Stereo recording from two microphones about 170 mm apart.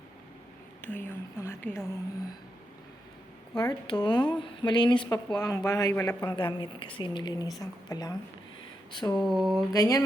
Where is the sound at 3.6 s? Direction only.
25° left (ahead or behind).